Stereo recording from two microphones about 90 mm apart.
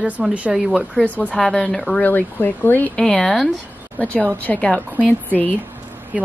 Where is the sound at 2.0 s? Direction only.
20° left (ahead or behind).